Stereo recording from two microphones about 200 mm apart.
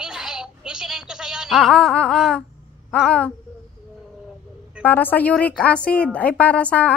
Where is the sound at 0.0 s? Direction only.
5° right (ahead or behind).